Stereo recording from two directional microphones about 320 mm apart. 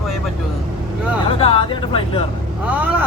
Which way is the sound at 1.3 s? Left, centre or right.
Centre.